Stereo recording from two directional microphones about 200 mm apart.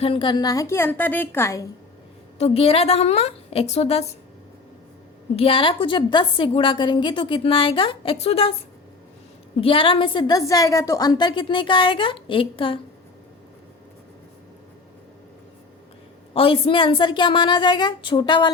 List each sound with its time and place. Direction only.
0.0 s a woman's voice: 25° left (ahead or behind)
2.4 s a woman's voice: 30° left (ahead or behind)
5.4 s a woman's voice: 25° left (ahead or behind)
9.6 s a woman's voice: 25° left (ahead or behind)
16.3 s a woman's voice: 25° left (ahead or behind)